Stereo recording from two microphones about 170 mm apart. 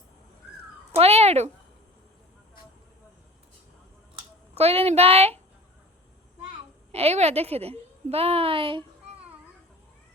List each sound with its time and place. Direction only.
0.9 s speech: 35° right (ahead or behind)
4.1 s speech: 35° right (ahead or behind)
6.9 s a woman's voice: 40° right (ahead or behind)